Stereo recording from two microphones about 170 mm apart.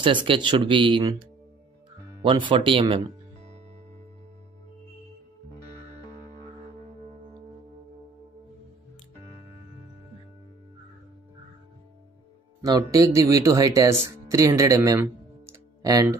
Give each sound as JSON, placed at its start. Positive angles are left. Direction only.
{"t": 0.0, "sound": "speech", "side_deg": -30}
{"t": 2.2, "sound": "speech", "side_deg": -30}
{"t": 7.0, "sound": "music", "side_deg": -40}
{"t": 12.6, "sound": "speech", "side_deg": -20}